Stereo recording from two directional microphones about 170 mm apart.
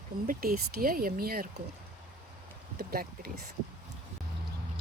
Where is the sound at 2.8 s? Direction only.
60° right (ahead or behind).